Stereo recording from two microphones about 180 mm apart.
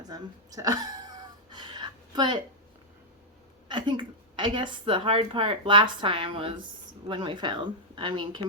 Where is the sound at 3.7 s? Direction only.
25° right (ahead or behind).